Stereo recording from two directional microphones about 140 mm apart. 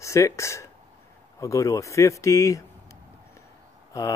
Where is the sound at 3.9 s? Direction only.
25° left (ahead or behind).